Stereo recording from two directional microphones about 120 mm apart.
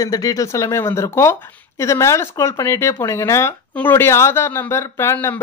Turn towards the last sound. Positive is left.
turn(degrees=20)  # may be behind; listen again after turning